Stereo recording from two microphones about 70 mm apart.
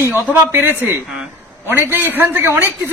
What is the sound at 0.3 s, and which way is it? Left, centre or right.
A woman's voice, right.